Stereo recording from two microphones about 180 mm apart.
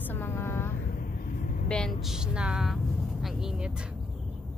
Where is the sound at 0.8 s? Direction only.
50° left (ahead or behind).